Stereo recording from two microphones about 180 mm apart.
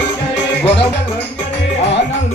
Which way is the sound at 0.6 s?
30° left (ahead or behind).